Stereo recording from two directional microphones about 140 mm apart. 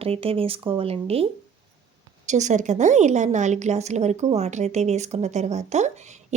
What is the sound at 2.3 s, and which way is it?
A woman's voice, 60° right (ahead or behind).